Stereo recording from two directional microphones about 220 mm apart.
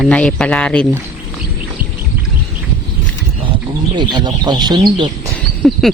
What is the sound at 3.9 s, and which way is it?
Speech, 20° right (ahead or behind).